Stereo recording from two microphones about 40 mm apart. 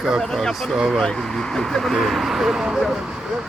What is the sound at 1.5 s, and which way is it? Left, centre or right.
Speech, centre.